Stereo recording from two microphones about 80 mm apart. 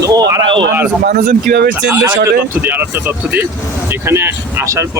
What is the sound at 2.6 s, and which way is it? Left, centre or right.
Speech, right.